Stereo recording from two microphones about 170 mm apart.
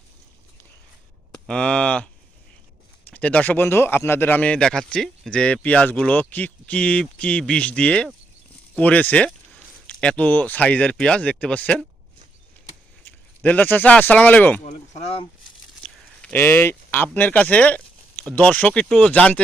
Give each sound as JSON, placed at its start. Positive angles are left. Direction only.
{"t": 1.5, "sound": "speech", "side_deg": 5}
{"t": 3.1, "sound": "speech", "side_deg": 10}
{"t": 13.4, "sound": "speech", "side_deg": 10}
{"t": 14.6, "sound": "speech", "side_deg": 40}
{"t": 15.8, "sound": "speech", "side_deg": 10}